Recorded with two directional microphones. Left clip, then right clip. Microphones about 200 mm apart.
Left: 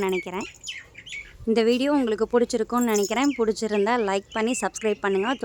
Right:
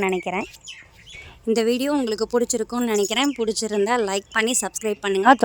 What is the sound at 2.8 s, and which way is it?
Speech, 40° right (ahead or behind).